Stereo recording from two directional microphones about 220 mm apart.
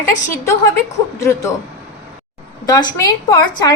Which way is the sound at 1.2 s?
15° left (ahead or behind).